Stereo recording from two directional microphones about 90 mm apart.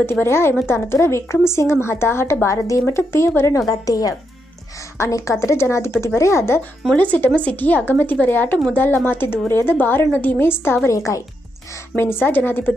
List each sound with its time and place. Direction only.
0.0 s a woman's voice: 25° left (ahead or behind)
7.0 s a woman's voice: 15° left (ahead or behind); by 11.2 s 35° left (ahead or behind)
11.9 s a woman's voice: 25° left (ahead or behind)